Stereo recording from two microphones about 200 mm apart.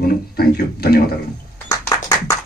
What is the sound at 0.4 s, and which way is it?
Speech, 50° left (ahead or behind).